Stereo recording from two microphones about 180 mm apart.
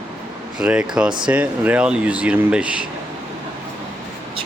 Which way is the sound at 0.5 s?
5° right (ahead or behind).